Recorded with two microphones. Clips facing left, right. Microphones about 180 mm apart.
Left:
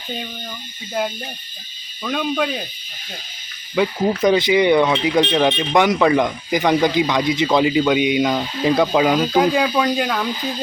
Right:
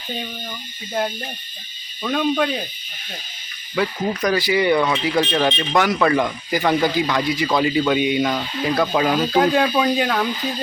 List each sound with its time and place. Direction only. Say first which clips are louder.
2.0 s speech: right 2 dB; centre (ahead or behind)
3.8 s speech: left 4 dB; 15° left (ahead or behind); by 10.2 s centre (ahead or behind)